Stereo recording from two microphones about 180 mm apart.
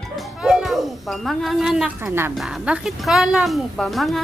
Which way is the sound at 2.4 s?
5° right (ahead or behind).